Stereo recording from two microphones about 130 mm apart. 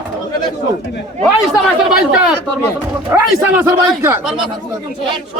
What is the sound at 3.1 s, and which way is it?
A man's voice, 20° right (ahead or behind).